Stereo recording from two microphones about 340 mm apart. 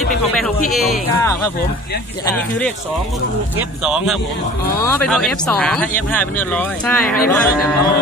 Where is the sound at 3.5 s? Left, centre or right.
Centre.